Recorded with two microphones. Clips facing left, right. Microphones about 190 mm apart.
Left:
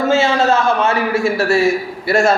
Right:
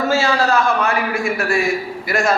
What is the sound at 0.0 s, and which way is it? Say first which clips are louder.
A man's voice: left 3 dB; 20° left (ahead or behind).